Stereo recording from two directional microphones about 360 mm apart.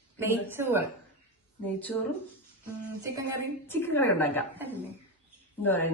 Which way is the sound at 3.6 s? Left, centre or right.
Centre.